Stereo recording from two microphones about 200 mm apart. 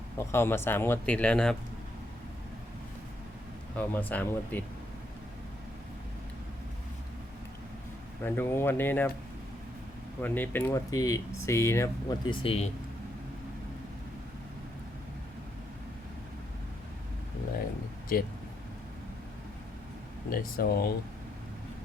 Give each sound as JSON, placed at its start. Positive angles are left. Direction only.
{"t": 0.2, "sound": "speech", "side_deg": 10}
{"t": 3.8, "sound": "speech", "side_deg": 10}
{"t": 8.2, "sound": "speech", "side_deg": 10}
{"t": 10.2, "sound": "speech", "side_deg": 10}
{"t": 18.1, "sound": "speech", "side_deg": 45}
{"t": 20.3, "sound": "speech", "side_deg": 50}